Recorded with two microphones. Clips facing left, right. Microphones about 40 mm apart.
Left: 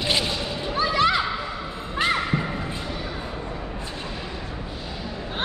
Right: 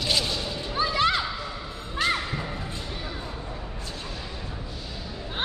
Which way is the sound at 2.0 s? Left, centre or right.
Centre.